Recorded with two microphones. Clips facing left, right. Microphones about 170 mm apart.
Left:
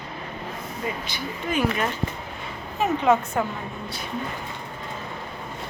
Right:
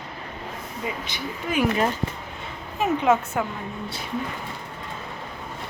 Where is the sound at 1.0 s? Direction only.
20° right (ahead or behind).